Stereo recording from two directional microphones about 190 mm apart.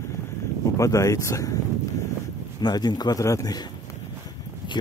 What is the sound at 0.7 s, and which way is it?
Speech, 15° left (ahead or behind).